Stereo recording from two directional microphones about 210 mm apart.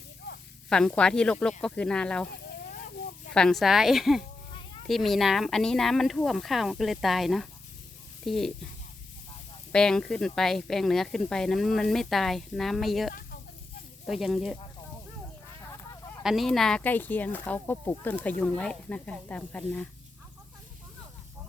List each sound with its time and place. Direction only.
0.7 s speech: 5° left (ahead or behind)
3.3 s speech: centre (ahead or behind)
9.7 s speech: 5° left (ahead or behind)
16.2 s speech: centre (ahead or behind)